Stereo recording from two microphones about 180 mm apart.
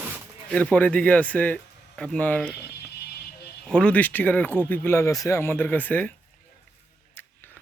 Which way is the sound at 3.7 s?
5° left (ahead or behind).